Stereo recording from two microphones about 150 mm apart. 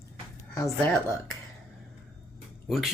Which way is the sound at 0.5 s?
20° left (ahead or behind).